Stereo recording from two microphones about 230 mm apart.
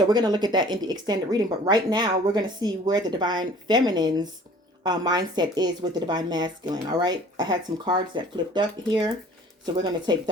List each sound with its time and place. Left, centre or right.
0.0 s speech: centre